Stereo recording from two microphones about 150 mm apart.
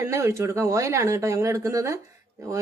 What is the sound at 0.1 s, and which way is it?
A woman's voice, 20° right (ahead or behind).